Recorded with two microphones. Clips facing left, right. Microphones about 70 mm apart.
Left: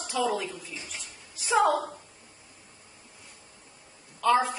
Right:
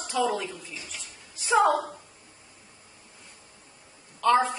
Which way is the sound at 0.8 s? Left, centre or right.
Left.